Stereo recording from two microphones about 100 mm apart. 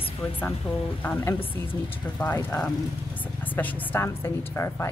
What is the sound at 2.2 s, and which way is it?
Speech, 40° left (ahead or behind).